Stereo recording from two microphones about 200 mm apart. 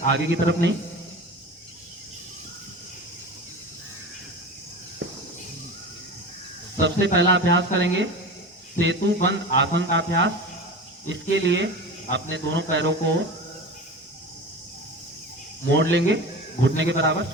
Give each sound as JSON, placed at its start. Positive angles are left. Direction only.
{"t": 0.1, "sound": "speech", "side_deg": -65}
{"t": 6.8, "sound": "speech", "side_deg": -60}
{"t": 15.7, "sound": "speech", "side_deg": -60}